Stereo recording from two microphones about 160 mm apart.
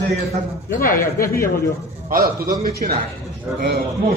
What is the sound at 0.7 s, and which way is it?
Speech, 65° left (ahead or behind).